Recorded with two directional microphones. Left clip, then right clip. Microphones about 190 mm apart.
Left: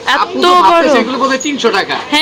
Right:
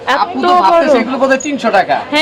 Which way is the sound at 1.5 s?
65° right (ahead or behind).